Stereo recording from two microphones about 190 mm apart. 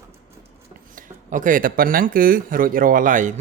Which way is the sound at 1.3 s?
45° right (ahead or behind).